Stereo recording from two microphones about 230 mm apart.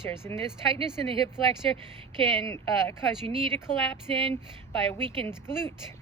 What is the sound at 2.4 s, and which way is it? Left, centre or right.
Speech, centre.